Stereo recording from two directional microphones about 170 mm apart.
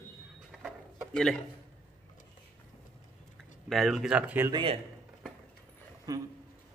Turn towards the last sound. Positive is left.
turn(degrees=-20)  # may be behind; listen again after turning